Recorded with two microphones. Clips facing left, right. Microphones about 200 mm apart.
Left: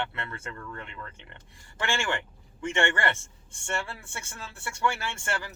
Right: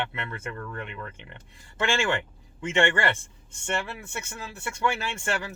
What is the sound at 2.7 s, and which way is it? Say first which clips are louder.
Speech: right 3 dB; 20° right (ahead or behind).